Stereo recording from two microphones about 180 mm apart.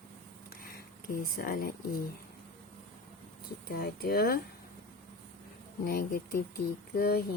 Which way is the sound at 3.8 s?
55° left (ahead or behind).